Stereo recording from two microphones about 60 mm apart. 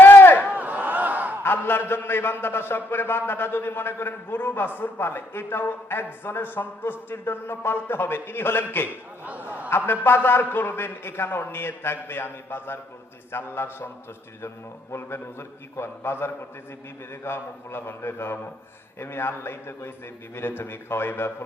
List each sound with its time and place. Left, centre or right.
0.0 s a sound: left
0.3 s battle cry: right
1.5 s a man's voice: left
9.2 s speech: right
9.6 s a man's voice: left
14.9 s a man's voice: left